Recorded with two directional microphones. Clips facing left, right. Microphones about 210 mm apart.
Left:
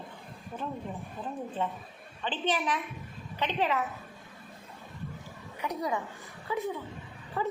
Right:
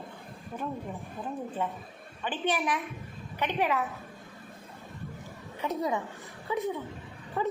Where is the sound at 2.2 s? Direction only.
10° right (ahead or behind).